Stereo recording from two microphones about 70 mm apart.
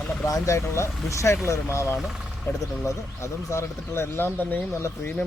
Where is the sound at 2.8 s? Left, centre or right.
Left.